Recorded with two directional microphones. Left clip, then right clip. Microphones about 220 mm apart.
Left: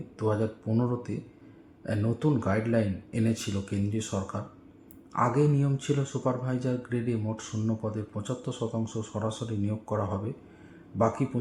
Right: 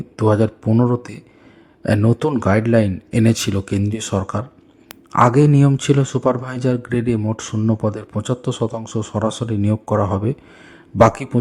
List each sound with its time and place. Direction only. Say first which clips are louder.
0.2 s speech: right 12 dB; 45° right (ahead or behind)